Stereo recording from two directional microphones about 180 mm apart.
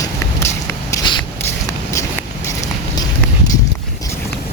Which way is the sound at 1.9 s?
15° left (ahead or behind).